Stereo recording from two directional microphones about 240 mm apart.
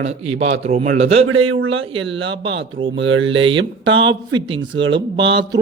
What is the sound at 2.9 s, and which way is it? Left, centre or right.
Speech, right.